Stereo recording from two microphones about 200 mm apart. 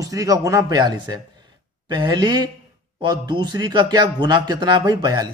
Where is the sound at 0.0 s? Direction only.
15° right (ahead or behind).